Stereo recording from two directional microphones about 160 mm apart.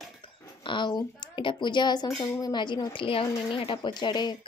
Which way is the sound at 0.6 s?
30° left (ahead or behind).